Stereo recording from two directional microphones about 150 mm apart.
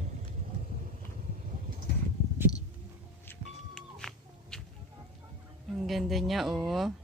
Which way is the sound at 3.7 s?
5° left (ahead or behind).